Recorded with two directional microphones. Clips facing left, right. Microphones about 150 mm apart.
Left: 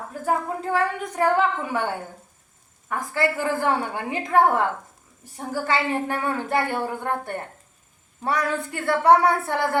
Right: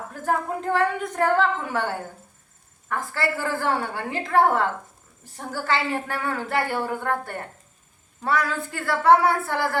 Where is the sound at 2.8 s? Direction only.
15° left (ahead or behind).